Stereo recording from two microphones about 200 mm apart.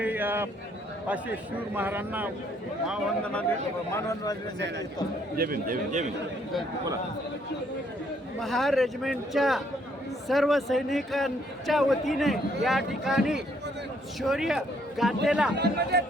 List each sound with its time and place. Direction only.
0.0 s a sound: 10° right (ahead or behind)
1.0 s a man's voice: 10° right (ahead or behind)
3.9 s a man's voice: 15° left (ahead or behind)
5.4 s a man's voice: 45° right (ahead or behind)
8.4 s a man's voice: centre (ahead or behind)
15.5 s a man's voice: 55° right (ahead or behind)